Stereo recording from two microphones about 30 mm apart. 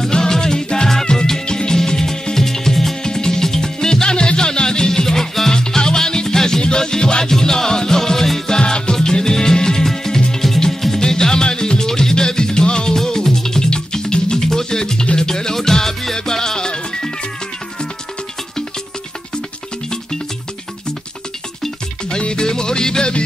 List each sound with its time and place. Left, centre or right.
0.1 s music: left
3.0 s music: left
5.5 s music: left
8.5 s music: left
22.2 s music: left